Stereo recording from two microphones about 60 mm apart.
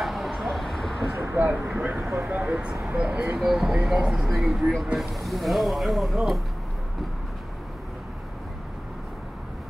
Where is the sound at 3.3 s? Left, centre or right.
Centre.